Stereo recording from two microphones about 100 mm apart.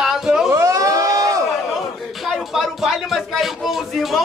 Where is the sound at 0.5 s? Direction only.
30° right (ahead or behind).